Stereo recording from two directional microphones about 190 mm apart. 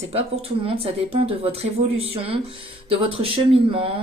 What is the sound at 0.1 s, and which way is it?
Speech, 30° right (ahead or behind).